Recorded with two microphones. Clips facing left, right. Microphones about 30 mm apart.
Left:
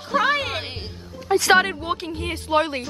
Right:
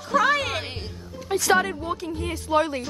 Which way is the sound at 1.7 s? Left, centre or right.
Left.